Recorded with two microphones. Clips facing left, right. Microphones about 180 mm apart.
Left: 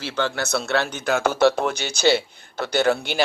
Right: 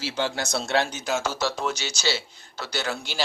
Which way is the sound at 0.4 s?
60° left (ahead or behind).